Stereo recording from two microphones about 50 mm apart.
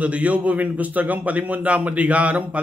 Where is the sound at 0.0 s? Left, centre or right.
Right.